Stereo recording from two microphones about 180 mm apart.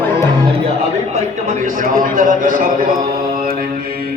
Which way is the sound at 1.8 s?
50° right (ahead or behind).